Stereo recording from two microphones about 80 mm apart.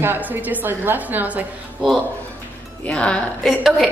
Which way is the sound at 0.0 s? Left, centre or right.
Right.